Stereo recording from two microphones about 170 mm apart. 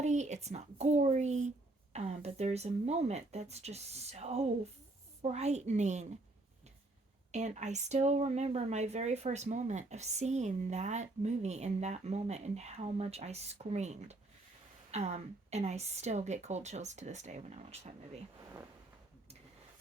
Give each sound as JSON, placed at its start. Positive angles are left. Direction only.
{"t": 0.0, "sound": "a sound", "side_deg": -45}
{"t": 0.4, "sound": "speech", "side_deg": -40}
{"t": 7.3, "sound": "speech", "side_deg": -45}